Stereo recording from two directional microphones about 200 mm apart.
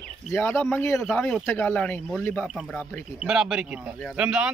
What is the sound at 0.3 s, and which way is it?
Speech, 10° left (ahead or behind).